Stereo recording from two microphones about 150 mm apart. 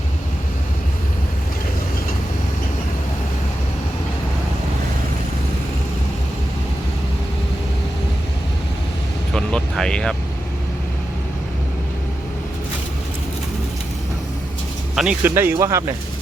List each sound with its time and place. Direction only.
9.3 s vehicle: 5° left (ahead or behind)
14.9 s speech: 5° right (ahead or behind)
15.4 s speech: 15° right (ahead or behind)